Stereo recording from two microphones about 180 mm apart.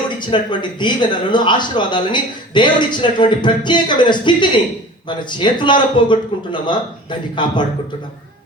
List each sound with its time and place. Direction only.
0.2 s speech: 25° left (ahead or behind)